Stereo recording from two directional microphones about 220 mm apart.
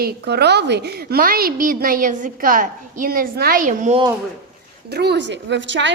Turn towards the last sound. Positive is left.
turn(degrees=-55)  # may be behind; listen again after turning